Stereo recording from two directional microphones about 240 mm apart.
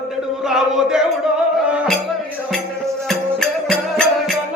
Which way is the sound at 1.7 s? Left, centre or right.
Centre.